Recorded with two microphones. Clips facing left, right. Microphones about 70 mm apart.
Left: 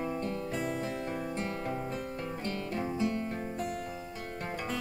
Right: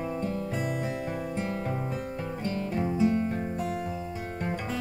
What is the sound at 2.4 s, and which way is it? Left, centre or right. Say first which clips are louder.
Guitar: right 6 dB; centre.